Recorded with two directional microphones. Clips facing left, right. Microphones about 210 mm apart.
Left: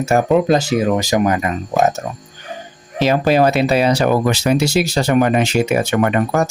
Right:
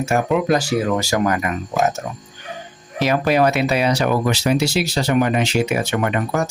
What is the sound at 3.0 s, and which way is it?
Speech, 30° left (ahead or behind).